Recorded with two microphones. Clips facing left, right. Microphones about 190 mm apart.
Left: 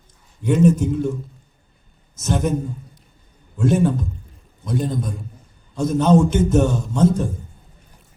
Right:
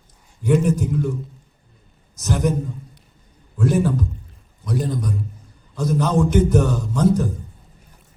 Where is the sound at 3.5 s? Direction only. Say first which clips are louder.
Left 1 dB; 25° left (ahead or behind).